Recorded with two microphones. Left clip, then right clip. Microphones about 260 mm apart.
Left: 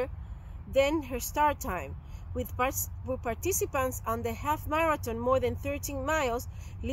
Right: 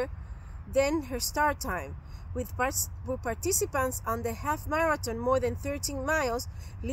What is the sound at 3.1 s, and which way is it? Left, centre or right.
Speech, centre.